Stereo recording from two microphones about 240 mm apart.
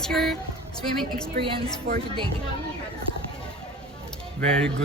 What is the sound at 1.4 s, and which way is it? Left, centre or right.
Speech, right.